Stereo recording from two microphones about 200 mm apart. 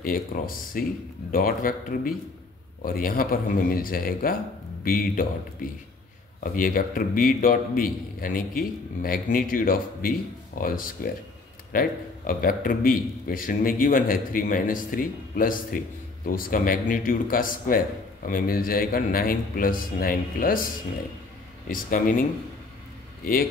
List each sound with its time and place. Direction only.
0.0 s a man's voice: 45° left (ahead or behind)